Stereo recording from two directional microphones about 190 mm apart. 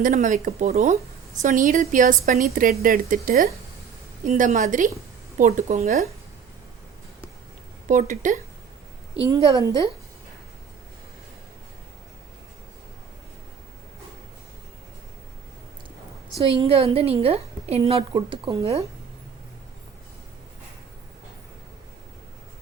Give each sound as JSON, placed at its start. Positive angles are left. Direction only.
{"t": 0.0, "sound": "a woman's voice", "side_deg": -40}
{"t": 7.9, "sound": "a woman's voice", "side_deg": -40}
{"t": 9.4, "sound": "a woman's voice", "side_deg": -25}
{"t": 16.4, "sound": "a woman's voice", "side_deg": -30}